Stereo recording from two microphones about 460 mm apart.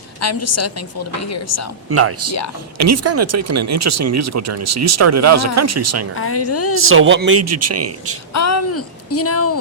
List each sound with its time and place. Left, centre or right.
0.2 s a woman's voice: left
1.9 s speech: right
6.1 s speech: left
6.7 s speech: right
8.3 s speech: left